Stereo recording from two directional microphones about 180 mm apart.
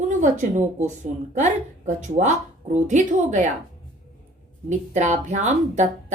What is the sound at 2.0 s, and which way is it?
Speech, 45° right (ahead or behind).